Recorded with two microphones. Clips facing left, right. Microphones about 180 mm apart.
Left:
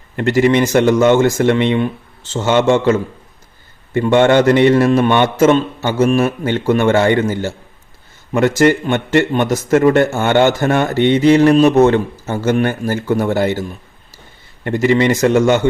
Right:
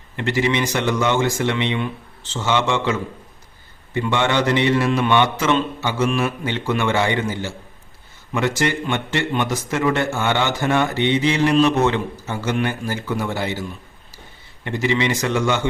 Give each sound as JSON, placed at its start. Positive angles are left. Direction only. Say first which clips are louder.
{"t": 0.2, "sound": "a man's voice", "louder": "left 8 dB", "side_deg": 50}